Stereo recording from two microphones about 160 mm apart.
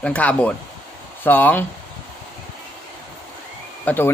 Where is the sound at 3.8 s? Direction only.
10° left (ahead or behind).